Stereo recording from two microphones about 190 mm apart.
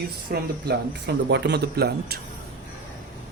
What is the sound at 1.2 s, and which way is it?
Speech, 65° right (ahead or behind).